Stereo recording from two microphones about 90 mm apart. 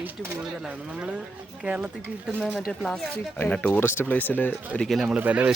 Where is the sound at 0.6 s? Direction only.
10° right (ahead or behind).